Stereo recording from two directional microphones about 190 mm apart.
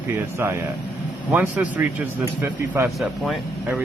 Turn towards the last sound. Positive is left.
turn(degrees=-5)  # may be behind; listen again after turning